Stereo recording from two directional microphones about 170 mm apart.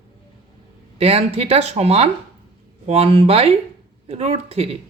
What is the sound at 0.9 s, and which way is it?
Speech, 35° right (ahead or behind).